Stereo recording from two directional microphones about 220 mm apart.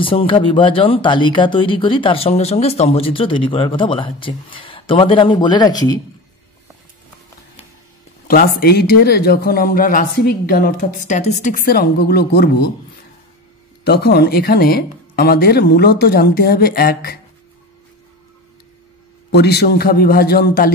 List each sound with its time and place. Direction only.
0.0 s speech: 25° left (ahead or behind)
8.3 s speech: 40° left (ahead or behind)
13.8 s speech: 45° left (ahead or behind)
19.3 s speech: 50° left (ahead or behind)